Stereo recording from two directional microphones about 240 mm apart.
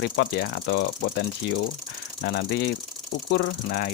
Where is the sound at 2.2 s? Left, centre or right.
Left.